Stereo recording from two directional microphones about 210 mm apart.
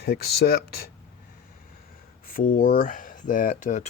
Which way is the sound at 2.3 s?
40° left (ahead or behind).